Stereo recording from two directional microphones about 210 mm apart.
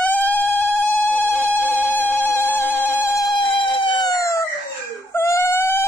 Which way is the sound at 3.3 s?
25° left (ahead or behind).